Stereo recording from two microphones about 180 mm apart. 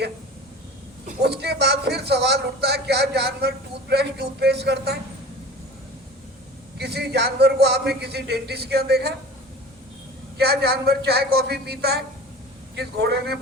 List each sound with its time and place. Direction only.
1.0 s a man's voice: 65° right (ahead or behind)
6.7 s a man's voice: 65° right (ahead or behind)
10.3 s a man's voice: 65° right (ahead or behind)